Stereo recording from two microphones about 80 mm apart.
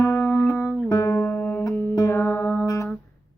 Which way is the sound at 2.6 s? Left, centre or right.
Left.